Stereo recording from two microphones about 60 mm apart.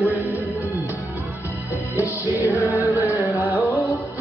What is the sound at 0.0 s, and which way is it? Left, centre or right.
Music, left.